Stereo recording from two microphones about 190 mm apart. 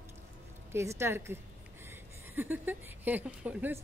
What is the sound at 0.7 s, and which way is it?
Speech, 15° right (ahead or behind).